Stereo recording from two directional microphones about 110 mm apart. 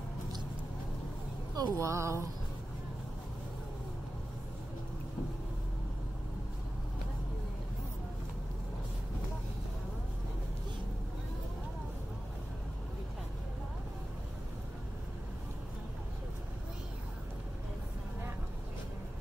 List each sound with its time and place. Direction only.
1.5 s speech: 30° right (ahead or behind)